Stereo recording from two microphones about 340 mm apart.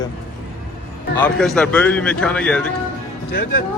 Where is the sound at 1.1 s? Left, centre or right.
Centre.